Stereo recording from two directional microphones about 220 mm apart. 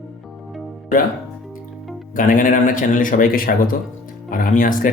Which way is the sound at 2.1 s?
40° left (ahead or behind).